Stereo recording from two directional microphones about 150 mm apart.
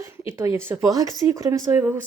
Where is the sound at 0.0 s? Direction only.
20° right (ahead or behind).